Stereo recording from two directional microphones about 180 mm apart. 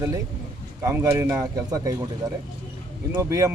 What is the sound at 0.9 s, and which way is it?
Speech, 15° right (ahead or behind).